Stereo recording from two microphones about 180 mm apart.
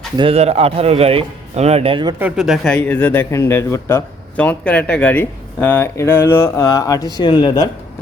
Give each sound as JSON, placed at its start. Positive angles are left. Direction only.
{"t": 0.2, "sound": "speech", "side_deg": -35}
{"t": 2.1, "sound": "speech", "side_deg": -5}